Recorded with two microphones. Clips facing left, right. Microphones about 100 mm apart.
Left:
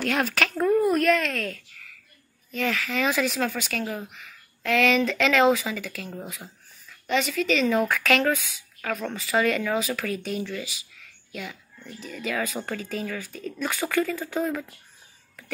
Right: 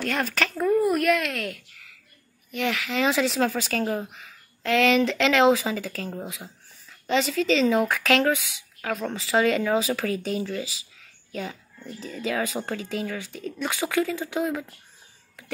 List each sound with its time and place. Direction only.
0.0 s speech: centre (ahead or behind)